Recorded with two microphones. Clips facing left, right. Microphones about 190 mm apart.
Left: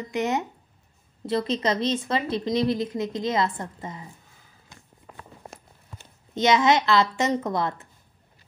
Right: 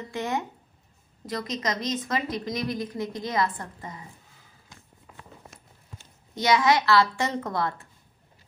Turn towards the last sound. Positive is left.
turn(degrees=20)  # may be behind; listen again after turning